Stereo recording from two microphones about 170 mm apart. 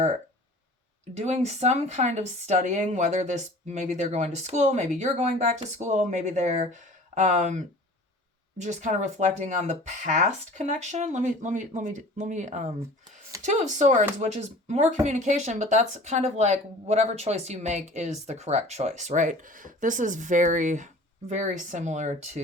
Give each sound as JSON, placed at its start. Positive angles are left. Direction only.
{"t": 1.1, "sound": "speech", "side_deg": -40}